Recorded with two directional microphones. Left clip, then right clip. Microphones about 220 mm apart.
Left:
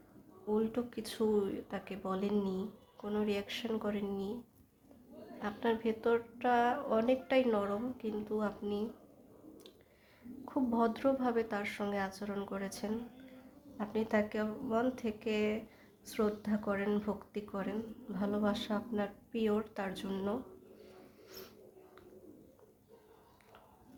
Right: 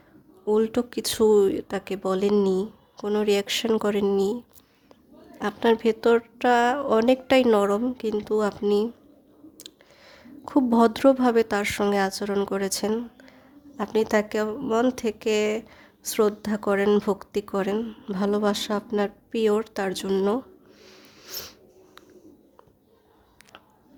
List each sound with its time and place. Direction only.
0.4 s a woman's voice: 50° right (ahead or behind)
5.4 s a woman's voice: 50° right (ahead or behind)
21.2 s a sound: 50° right (ahead or behind)